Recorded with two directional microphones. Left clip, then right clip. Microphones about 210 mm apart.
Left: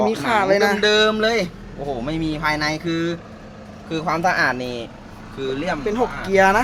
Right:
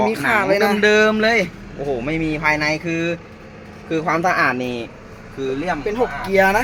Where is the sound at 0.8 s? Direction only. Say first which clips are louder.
Right 2 dB; 30° right (ahead or behind).